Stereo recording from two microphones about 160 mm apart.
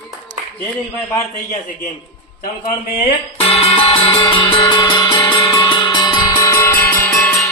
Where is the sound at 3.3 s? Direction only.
40° left (ahead or behind); by 7.2 s 15° left (ahead or behind).